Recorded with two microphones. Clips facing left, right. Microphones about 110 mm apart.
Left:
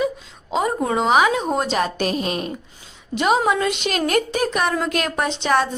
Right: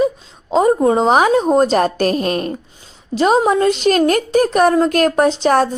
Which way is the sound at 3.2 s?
35° right (ahead or behind).